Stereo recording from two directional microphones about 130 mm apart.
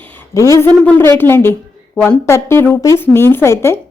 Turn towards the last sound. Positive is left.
turn(degrees=20)  # may be behind; listen again after turning